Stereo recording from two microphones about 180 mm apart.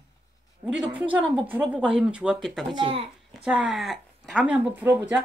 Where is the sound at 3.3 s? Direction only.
5° right (ahead or behind).